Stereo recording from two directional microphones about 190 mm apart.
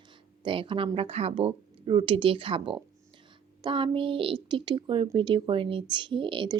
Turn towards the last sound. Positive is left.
turn(degrees=-25)  # may be behind; listen again after turning